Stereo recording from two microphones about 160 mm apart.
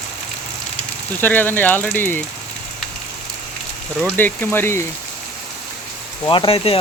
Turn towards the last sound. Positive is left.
turn(degrees=35)  # may be behind; listen again after turning